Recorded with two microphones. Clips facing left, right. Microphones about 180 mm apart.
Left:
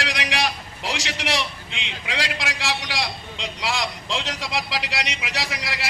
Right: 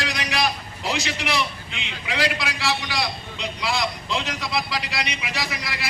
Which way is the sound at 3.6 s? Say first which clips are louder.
Right 1 dB; 90° left.